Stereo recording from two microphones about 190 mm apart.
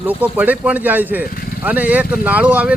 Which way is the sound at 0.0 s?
10° right (ahead or behind).